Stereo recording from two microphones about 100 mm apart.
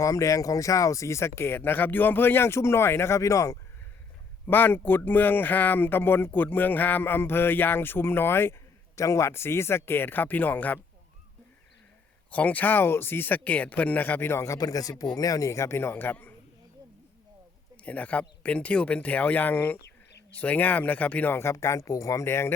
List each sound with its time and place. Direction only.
0.0 s speech: 30° left (ahead or behind)
4.4 s speech: 20° left (ahead or behind)
12.3 s speech: 15° left (ahead or behind)
17.8 s speech: 15° left (ahead or behind)